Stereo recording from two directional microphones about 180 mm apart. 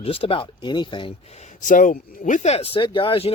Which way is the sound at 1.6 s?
45° left (ahead or behind).